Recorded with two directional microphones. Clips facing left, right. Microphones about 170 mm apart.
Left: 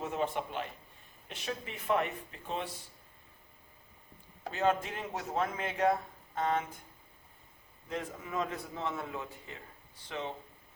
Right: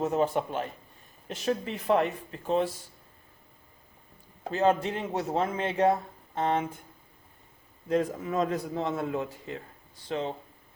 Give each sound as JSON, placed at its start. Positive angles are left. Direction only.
{"t": 0.0, "sound": "speech", "side_deg": -40}
{"t": 4.5, "sound": "speech", "side_deg": -35}
{"t": 7.9, "sound": "speech", "side_deg": -40}
{"t": 10.1, "sound": "speech", "side_deg": -35}